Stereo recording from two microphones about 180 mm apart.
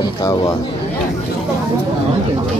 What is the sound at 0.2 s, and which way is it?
Speech, 20° left (ahead or behind).